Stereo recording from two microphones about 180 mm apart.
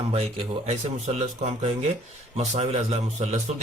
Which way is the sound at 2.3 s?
35° right (ahead or behind).